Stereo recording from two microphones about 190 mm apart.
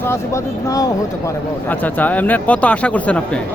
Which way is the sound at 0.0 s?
15° left (ahead or behind).